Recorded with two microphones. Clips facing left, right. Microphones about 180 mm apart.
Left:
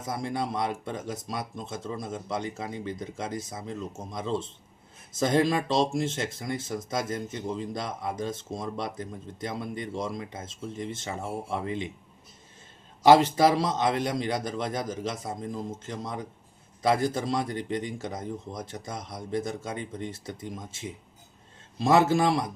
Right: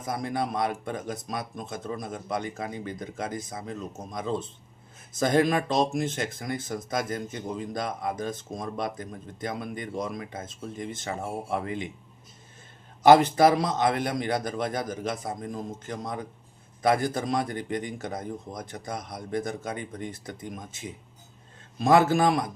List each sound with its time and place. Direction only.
0.0 s speech: 25° left (ahead or behind)
13.1 s speech: 25° left (ahead or behind)